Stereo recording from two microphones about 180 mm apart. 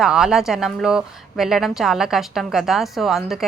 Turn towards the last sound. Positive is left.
turn(degrees=0)  # may be behind; listen again after turning